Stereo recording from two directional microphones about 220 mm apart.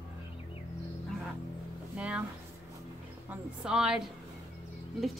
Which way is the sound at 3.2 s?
5° right (ahead or behind).